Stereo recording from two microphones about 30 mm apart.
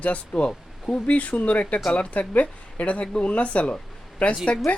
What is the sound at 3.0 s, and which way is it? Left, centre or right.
Speech, left.